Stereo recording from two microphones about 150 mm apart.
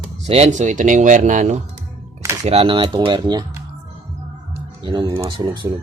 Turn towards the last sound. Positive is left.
turn(degrees=-35)  # may be behind; listen again after turning